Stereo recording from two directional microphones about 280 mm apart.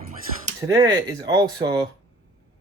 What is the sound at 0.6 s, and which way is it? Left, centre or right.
Speech, centre.